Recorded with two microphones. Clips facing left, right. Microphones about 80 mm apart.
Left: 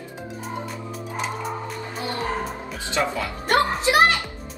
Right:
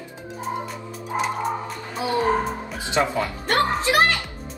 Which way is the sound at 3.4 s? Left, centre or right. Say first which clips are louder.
Left 2 dB; left.